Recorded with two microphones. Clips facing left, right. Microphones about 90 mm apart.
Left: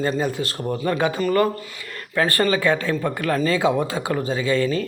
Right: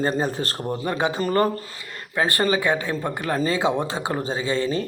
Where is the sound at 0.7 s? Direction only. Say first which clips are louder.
Left 3 dB; 20° right (ahead or behind).